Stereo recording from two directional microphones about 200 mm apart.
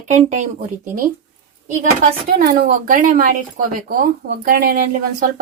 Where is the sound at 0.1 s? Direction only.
35° right (ahead or behind).